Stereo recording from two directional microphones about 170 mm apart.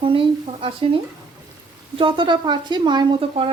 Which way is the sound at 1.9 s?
30° right (ahead or behind).